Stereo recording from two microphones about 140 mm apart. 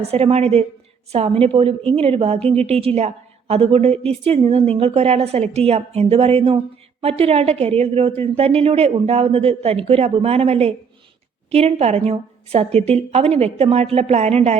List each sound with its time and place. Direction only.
0.1 s a woman's voice: 45° right (ahead or behind)